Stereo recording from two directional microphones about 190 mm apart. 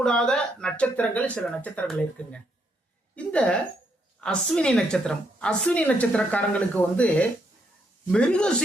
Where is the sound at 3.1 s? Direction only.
5° left (ahead or behind).